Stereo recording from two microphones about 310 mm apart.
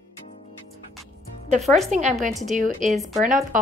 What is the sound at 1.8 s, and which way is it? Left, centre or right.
Speech, right.